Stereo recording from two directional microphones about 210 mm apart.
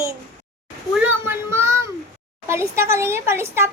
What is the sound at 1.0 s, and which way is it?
A child's voice, 10° right (ahead or behind).